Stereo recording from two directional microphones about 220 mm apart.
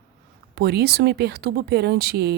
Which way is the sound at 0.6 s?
45° right (ahead or behind).